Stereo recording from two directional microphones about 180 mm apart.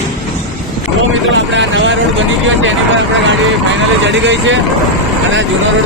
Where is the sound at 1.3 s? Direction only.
90° right.